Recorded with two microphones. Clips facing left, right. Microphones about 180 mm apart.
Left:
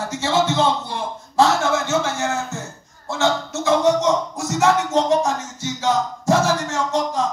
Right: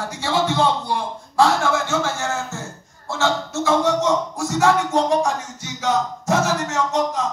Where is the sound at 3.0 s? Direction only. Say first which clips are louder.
Left 1 dB; 20° left (ahead or behind).